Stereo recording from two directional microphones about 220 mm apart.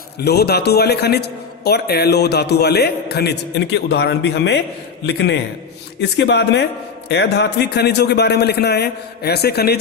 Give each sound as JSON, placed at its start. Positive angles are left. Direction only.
{"t": 0.2, "sound": "a man's voice", "side_deg": 45}